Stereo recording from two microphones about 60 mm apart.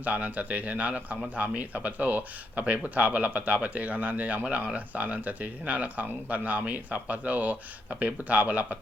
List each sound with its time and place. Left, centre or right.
0.0 s a man's voice: right